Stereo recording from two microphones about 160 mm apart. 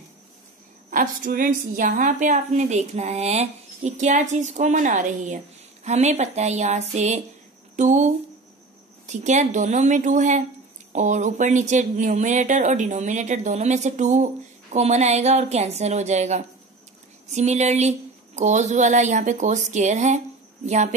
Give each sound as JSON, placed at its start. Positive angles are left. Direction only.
{"t": 0.8, "sound": "speech", "side_deg": -55}